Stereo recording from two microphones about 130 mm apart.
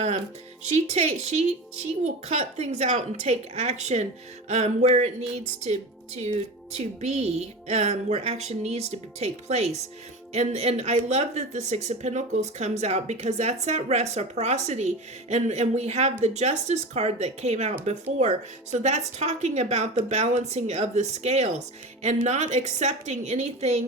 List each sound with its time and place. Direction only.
0.6 s speech: 60° right (ahead or behind)